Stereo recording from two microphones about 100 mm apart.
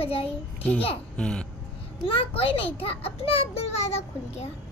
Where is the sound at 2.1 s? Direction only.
65° left (ahead or behind); by 4.5 s 90° left.